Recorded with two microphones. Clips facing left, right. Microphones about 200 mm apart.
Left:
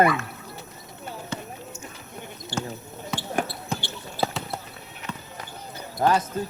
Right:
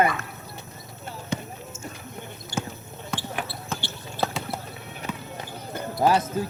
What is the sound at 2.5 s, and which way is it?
Basketball bounce, 35° left (ahead or behind).